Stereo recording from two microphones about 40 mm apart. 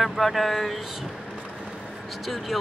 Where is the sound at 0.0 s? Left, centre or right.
Centre.